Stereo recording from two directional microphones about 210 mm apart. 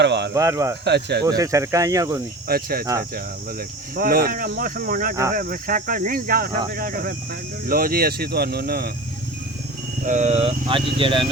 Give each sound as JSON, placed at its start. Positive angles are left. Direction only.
{"t": 0.0, "sound": "speech", "side_deg": -55}
{"t": 0.3, "sound": "speech", "side_deg": -15}
{"t": 0.9, "sound": "speech", "side_deg": -50}
{"t": 1.2, "sound": "speech", "side_deg": -15}
{"t": 2.5, "sound": "speech", "side_deg": -45}
{"t": 3.9, "sound": "speech", "side_deg": -45}
{"t": 10.1, "sound": "speech", "side_deg": -35}